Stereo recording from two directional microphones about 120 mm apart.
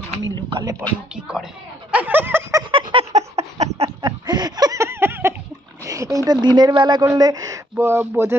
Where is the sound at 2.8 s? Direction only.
45° right (ahead or behind).